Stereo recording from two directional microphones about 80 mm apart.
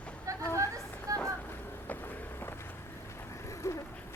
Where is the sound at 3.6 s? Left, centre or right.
Left.